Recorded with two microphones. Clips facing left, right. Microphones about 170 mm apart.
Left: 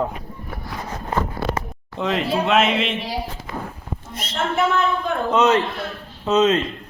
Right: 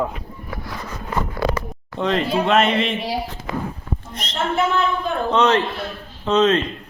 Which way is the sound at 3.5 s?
90° right.